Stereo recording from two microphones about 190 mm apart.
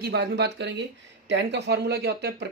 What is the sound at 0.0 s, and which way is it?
Speech, 60° right (ahead or behind).